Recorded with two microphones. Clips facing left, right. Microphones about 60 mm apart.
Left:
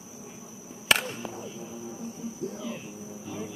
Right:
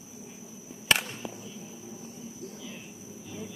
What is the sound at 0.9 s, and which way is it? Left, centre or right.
Chop, centre.